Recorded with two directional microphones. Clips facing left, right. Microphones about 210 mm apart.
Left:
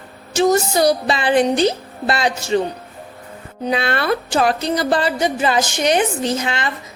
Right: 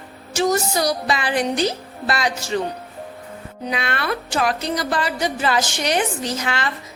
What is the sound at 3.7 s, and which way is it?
A woman's voice, 30° left (ahead or behind).